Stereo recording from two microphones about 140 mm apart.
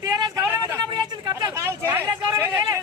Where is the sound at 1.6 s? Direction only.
20° right (ahead or behind).